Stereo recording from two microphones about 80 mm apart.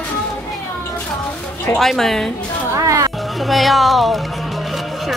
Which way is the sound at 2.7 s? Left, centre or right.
Right.